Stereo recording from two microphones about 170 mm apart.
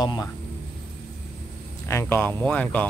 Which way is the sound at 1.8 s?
15° left (ahead or behind).